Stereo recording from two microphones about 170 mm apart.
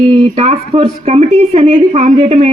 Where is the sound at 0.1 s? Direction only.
35° right (ahead or behind).